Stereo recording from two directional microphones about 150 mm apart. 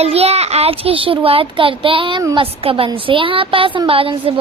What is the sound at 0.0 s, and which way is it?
A woman's voice, 45° right (ahead or behind).